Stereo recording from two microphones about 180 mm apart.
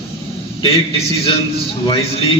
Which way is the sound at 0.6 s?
30° left (ahead or behind).